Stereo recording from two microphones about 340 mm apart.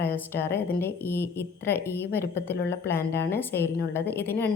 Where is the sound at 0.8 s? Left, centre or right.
Centre.